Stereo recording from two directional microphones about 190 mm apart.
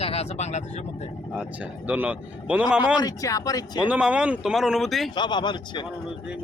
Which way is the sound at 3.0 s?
20° left (ahead or behind).